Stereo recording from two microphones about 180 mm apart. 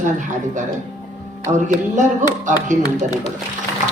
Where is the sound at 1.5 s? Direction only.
45° right (ahead or behind).